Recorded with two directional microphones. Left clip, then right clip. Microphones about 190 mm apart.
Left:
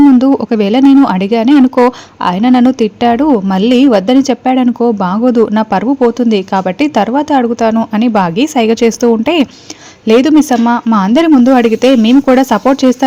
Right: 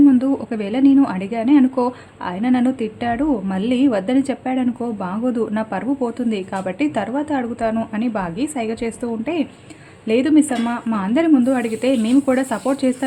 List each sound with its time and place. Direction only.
0.2 s speech: 40° left (ahead or behind)